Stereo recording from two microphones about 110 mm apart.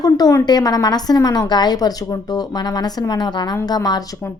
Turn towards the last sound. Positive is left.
turn(degrees=35)  # may be behind; listen again after turning